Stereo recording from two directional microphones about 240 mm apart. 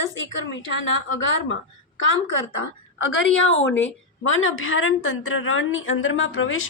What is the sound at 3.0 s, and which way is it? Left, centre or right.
A woman's voice, left.